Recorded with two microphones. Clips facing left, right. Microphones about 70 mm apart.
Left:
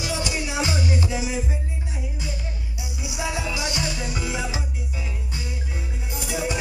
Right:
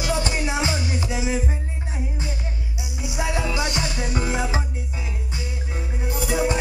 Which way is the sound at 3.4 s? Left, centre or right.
Right.